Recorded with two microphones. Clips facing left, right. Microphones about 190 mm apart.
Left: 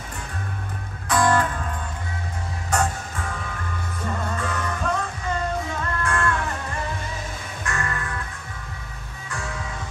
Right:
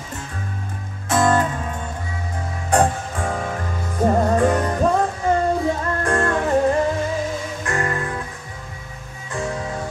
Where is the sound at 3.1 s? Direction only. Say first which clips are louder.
Right 8 dB; 50° right (ahead or behind).